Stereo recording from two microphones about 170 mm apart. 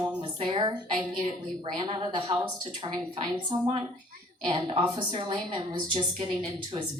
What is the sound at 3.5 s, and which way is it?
A woman's voice, 35° right (ahead or behind).